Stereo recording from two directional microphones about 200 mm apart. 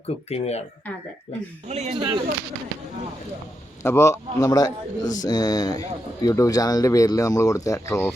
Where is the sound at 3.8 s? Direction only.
15° left (ahead or behind).